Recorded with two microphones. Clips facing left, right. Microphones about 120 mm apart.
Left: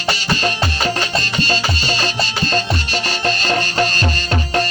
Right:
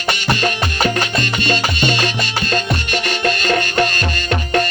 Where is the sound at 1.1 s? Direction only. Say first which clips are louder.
Right 1 dB; 35° left (ahead or behind).